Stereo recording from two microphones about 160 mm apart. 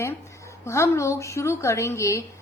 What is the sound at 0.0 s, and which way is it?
A woman's voice, 15° left (ahead or behind).